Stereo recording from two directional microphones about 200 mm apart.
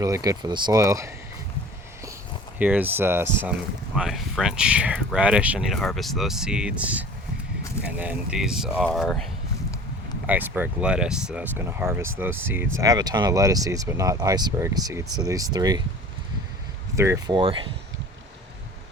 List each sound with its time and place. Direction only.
0.0 s speech: 15° right (ahead or behind)
2.6 s speech: 10° right (ahead or behind)
10.2 s speech: 10° right (ahead or behind)
16.9 s speech: 15° right (ahead or behind)